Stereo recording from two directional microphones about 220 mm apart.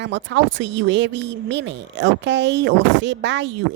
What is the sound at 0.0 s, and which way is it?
Speech, 55° right (ahead or behind).